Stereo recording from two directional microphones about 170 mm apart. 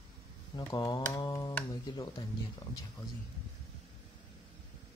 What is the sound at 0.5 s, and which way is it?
Speech, 25° left (ahead or behind).